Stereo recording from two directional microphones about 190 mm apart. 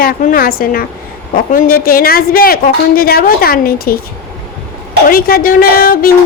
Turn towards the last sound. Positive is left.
turn(degrees=50)  # may be behind; listen again after turning